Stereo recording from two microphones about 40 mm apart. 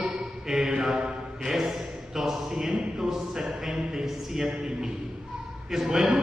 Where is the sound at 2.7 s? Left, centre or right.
Right.